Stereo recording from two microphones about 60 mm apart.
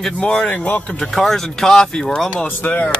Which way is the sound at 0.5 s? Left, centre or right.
Left.